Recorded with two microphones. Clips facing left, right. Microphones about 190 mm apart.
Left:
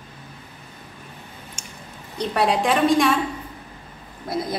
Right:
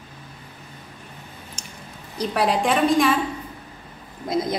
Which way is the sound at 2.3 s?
Centre (ahead or behind).